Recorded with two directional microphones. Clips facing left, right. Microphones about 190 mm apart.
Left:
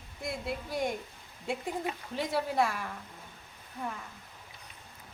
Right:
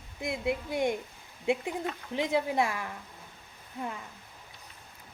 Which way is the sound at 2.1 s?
15° right (ahead or behind).